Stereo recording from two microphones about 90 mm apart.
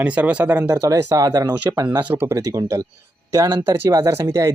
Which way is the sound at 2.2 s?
35° right (ahead or behind).